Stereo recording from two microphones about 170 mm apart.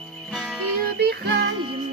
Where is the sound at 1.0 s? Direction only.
70° right (ahead or behind).